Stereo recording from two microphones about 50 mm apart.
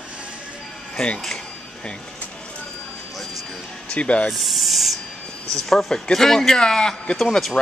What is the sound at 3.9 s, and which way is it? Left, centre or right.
Speech, left.